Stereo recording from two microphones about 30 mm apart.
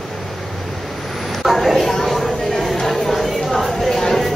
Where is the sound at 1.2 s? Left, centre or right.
Centre.